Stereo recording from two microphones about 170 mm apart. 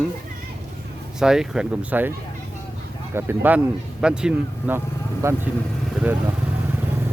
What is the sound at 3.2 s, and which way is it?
Speech, 10° right (ahead or behind).